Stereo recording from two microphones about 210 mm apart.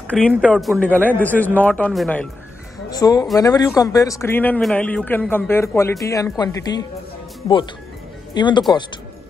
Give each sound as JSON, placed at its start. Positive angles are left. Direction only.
{"t": 0.3, "sound": "a man's voice", "side_deg": -5}
{"t": 2.9, "sound": "a man's voice", "side_deg": 20}
{"t": 8.4, "sound": "speech", "side_deg": 20}